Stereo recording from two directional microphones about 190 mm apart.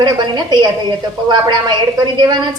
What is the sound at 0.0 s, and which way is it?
A woman's voice, 25° right (ahead or behind).